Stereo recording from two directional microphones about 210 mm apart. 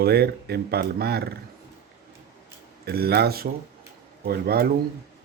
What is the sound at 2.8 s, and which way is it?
Speech, 50° right (ahead or behind).